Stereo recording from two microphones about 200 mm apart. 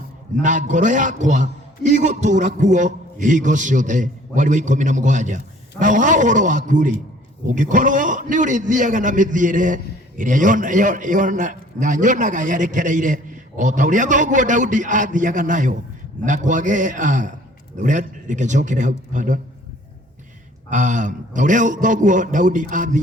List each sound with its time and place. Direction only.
0.4 s a man's voice: 40° right (ahead or behind)
20.7 s a man's voice: 40° right (ahead or behind)